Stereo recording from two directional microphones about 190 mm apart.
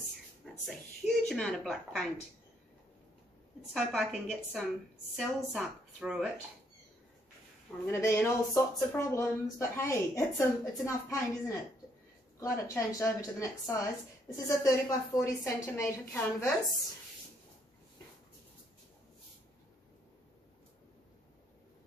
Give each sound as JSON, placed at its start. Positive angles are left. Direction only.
{"t": 0.7, "sound": "speech", "side_deg": 0}
{"t": 3.7, "sound": "speech", "side_deg": 0}
{"t": 7.8, "sound": "speech", "side_deg": 15}